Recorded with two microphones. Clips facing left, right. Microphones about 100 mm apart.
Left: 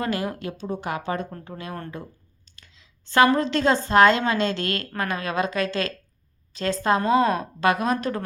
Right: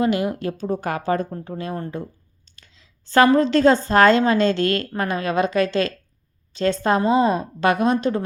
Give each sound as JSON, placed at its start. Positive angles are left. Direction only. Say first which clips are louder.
{"t": 0.0, "sound": "a woman's voice", "louder": "right 6 dB", "side_deg": -20}
{"t": 0.4, "sound": "a woman's voice", "louder": "right 5 dB", "side_deg": -45}
{"t": 2.6, "sound": "clicking", "louder": "right 1 dB", "side_deg": -35}
{"t": 3.3, "sound": "a woman's voice", "louder": "right 6 dB", "side_deg": -35}